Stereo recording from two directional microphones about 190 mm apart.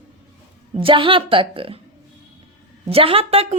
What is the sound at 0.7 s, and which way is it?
A woman's voice, 25° right (ahead or behind).